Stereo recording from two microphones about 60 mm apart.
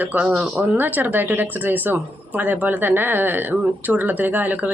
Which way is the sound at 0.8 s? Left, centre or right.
Right.